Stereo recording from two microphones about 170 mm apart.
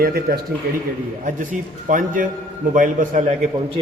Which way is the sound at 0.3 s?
60° right (ahead or behind).